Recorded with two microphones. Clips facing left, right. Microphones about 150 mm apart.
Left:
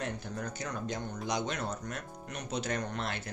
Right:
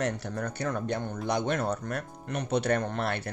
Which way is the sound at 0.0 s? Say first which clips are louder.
Right 6 dB; 70° right (ahead or behind).